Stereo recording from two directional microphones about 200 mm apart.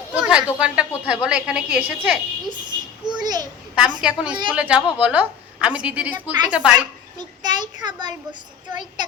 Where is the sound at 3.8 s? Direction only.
5° right (ahead or behind).